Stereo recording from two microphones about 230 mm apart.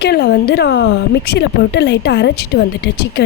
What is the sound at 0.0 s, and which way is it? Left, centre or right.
A woman's voice, left.